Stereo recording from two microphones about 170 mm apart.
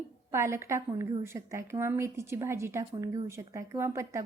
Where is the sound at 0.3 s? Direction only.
15° right (ahead or behind).